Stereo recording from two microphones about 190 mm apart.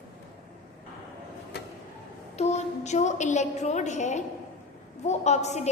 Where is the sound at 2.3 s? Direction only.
35° left (ahead or behind).